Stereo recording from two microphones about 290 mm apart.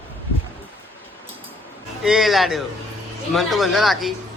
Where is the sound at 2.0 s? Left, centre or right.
Centre.